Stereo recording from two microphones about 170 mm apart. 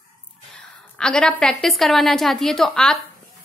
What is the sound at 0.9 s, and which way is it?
A woman's voice, 5° left (ahead or behind).